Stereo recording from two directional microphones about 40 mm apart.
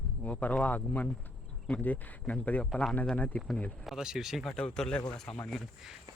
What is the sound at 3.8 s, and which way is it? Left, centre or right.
Speech, centre.